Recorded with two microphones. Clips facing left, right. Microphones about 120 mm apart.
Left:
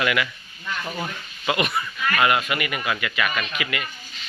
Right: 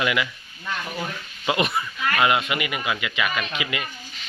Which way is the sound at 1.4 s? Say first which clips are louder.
Right 1 dB; 25° right (ahead or behind).